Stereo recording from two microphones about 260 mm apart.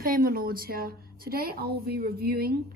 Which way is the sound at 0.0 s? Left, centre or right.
Right.